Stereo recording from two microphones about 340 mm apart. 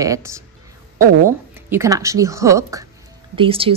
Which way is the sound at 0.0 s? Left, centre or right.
Centre.